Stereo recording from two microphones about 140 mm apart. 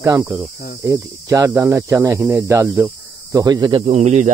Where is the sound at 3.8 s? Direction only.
50° right (ahead or behind).